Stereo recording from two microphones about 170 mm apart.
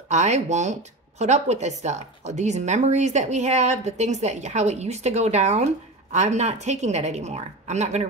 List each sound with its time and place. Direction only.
0.1 s a woman's voice: 40° right (ahead or behind)